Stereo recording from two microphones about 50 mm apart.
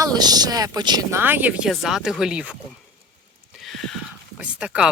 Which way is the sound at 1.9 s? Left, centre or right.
Centre.